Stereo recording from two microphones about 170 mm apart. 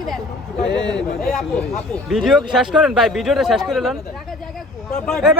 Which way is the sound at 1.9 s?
Centre (ahead or behind).